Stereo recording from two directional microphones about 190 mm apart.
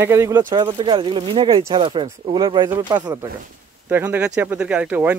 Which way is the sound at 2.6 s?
10° right (ahead or behind).